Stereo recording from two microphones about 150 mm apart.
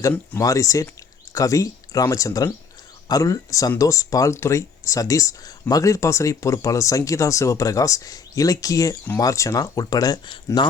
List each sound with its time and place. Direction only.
0.3 s speech: 20° left (ahead or behind)